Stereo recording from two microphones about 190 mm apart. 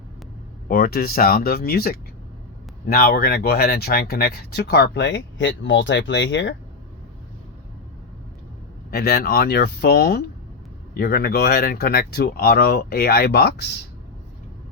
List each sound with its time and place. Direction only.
0.7 s speech: 50° left (ahead or behind); by 6.5 s 70° left (ahead or behind)
8.9 s speech: 55° left (ahead or behind)